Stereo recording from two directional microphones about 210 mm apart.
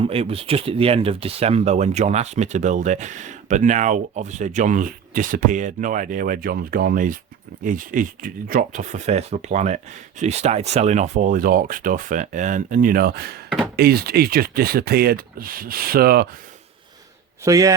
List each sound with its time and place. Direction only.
0.0 s speech: 30° right (ahead or behind); by 16.3 s 45° right (ahead or behind)
17.4 s a man's voice: 15° right (ahead or behind)